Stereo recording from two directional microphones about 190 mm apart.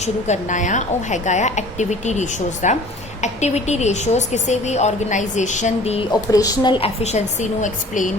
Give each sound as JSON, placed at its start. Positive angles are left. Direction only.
{"t": 0.0, "sound": "a woman's voice", "side_deg": 40}
{"t": 6.3, "sound": "a woman's voice", "side_deg": 20}